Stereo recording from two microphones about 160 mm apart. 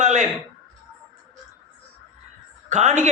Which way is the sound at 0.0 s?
50° right (ahead or behind).